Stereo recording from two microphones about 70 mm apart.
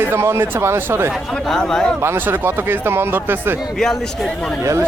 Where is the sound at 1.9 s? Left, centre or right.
Right.